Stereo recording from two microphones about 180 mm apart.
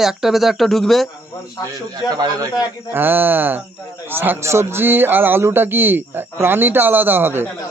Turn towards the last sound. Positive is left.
turn(degrees=-10)  # may be behind; listen again after turning